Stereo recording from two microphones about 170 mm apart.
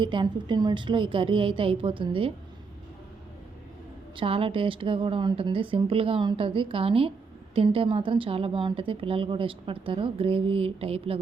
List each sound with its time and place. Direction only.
0.0 s a woman's voice: 30° right (ahead or behind)
4.2 s a woman's voice: 30° right (ahead or behind)